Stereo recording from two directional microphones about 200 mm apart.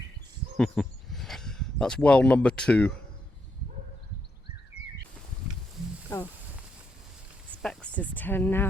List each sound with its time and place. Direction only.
0.5 s speech: centre (ahead or behind)
6.1 s speech: 15° left (ahead or behind)
7.6 s speech: 5° left (ahead or behind)